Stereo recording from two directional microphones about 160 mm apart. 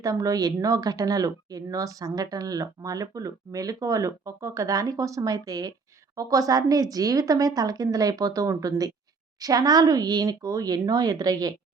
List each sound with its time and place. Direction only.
0.0 s a woman's voice: 20° right (ahead or behind)